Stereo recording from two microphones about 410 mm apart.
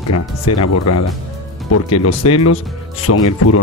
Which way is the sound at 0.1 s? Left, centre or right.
Left.